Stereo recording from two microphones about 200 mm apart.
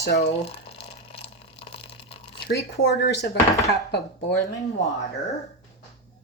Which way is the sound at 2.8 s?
55° left (ahead or behind).